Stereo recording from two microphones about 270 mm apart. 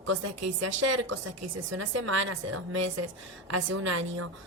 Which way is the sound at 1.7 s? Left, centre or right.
Right.